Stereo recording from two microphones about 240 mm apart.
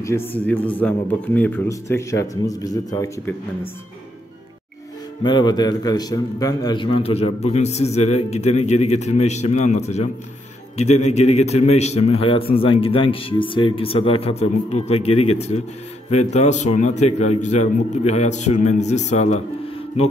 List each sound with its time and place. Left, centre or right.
0.0 s a man's voice: centre
5.2 s a man's voice: centre
11.1 s a man's voice: left